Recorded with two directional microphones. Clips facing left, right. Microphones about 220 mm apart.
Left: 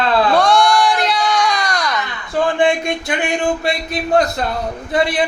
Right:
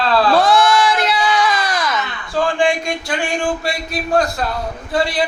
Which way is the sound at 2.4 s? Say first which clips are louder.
Left 1 dB; 20° left (ahead or behind).